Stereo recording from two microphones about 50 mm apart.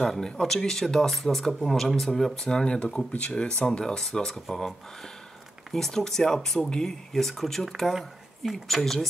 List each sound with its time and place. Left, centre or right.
0.0 s speech: centre
2.4 s speech: centre
5.7 s speech: centre